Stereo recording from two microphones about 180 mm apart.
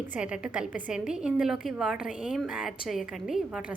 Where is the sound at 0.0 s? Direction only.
5° right (ahead or behind).